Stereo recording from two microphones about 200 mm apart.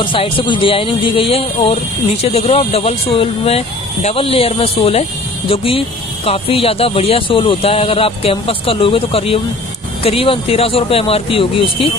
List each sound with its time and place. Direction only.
0.0 s speech: 25° left (ahead or behind)